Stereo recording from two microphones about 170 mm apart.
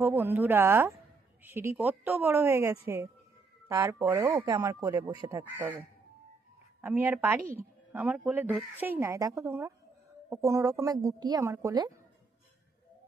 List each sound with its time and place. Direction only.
0.0 s a woman's voice: 10° right (ahead or behind)